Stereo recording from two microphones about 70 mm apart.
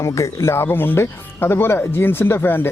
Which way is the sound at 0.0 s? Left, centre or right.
Left.